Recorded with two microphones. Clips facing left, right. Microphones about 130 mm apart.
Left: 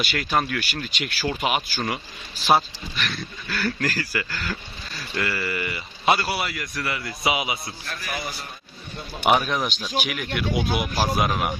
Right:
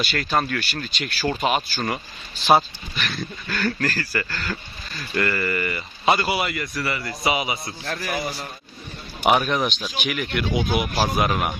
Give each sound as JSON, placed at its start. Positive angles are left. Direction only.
{"t": 0.0, "sound": "speech", "side_deg": 10}
{"t": 3.0, "sound": "speech", "side_deg": 0}
{"t": 7.9, "sound": "a man's voice", "side_deg": -50}
{"t": 8.1, "sound": "a man's voice", "side_deg": -25}
{"t": 9.2, "sound": "speech", "side_deg": 0}